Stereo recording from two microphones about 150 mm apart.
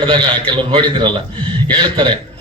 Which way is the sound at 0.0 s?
30° right (ahead or behind).